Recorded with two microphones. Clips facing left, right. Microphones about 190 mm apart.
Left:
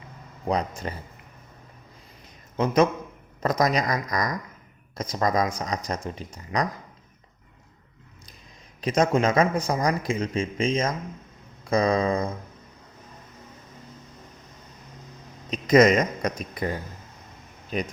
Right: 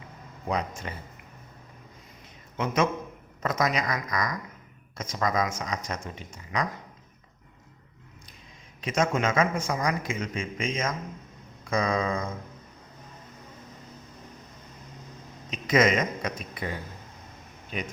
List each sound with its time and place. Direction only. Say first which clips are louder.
0.4 s speech: left 4 dB; 35° left (ahead or behind)
2.6 s speech: left 5 dB; 35° left (ahead or behind)
8.8 s speech: left 4 dB; 35° left (ahead or behind)
15.4 s a man's voice: left 6 dB; 40° left (ahead or behind)